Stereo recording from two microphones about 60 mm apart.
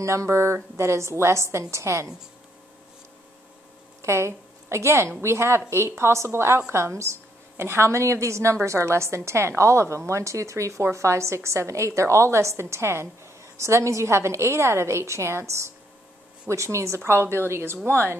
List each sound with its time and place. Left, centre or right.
0.0 s a woman's voice: right
4.0 s a woman's voice: right